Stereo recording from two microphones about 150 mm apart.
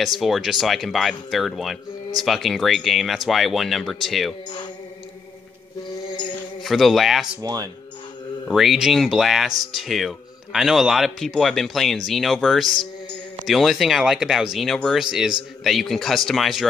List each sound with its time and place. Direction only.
0.0 s speech: centre (ahead or behind)
6.3 s a sound: centre (ahead or behind)
7.4 s speech: 25° right (ahead or behind)
8.5 s speech: centre (ahead or behind)